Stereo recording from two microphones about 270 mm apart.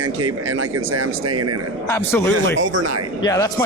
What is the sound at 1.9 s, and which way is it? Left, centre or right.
Speech, centre.